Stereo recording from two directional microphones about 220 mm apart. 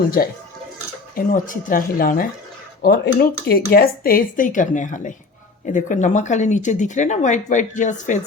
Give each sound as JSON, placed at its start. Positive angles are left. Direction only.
{"t": 0.2, "sound": "speech", "side_deg": 40}